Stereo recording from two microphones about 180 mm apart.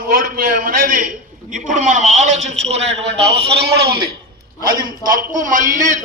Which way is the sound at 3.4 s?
65° right (ahead or behind).